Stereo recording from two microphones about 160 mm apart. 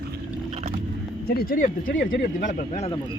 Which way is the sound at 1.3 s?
70° left (ahead or behind).